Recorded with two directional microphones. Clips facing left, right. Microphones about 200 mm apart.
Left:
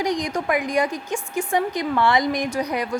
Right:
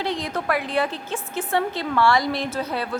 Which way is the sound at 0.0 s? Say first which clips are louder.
Left 3 dB; 15° left (ahead or behind).